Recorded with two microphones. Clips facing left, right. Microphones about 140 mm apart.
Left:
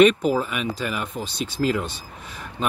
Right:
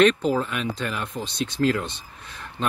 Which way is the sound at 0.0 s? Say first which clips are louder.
Left 2 dB; 10° left (ahead or behind).